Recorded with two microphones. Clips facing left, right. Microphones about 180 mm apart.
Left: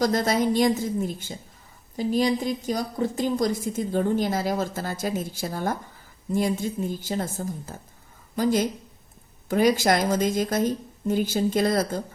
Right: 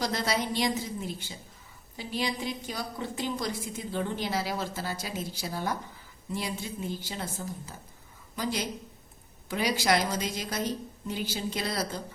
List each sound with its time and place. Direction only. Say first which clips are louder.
0.0 s a woman's voice: left 8 dB; 45° left (ahead or behind)